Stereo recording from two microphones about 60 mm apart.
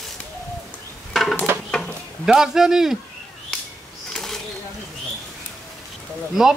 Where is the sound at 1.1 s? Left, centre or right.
Centre.